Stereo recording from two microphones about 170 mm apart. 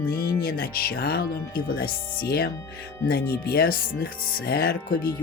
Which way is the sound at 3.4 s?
60° left (ahead or behind).